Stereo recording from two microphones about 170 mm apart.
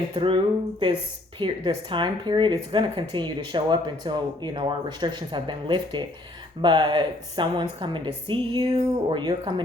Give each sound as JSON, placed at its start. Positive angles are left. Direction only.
{"t": 0.1, "sound": "speech", "side_deg": -30}
{"t": 1.4, "sound": "a woman's voice", "side_deg": -30}